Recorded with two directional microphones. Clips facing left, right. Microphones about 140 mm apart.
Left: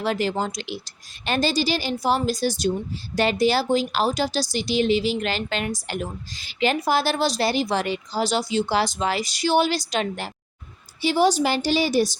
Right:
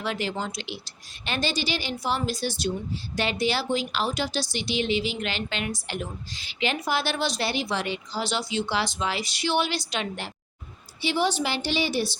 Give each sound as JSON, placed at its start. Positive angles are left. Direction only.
{"t": 0.0, "sound": "speech", "side_deg": 40}